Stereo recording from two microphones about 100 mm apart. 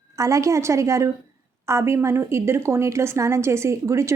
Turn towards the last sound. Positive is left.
turn(degrees=-30)  # may be behind; listen again after turning